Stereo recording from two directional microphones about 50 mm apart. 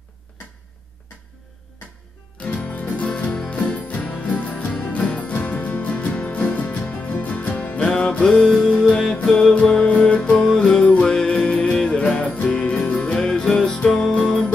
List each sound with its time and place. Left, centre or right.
2.3 s music: left; by 14.4 s centre